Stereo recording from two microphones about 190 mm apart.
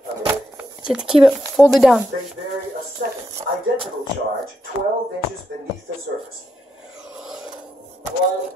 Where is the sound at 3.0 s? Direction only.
50° right (ahead or behind).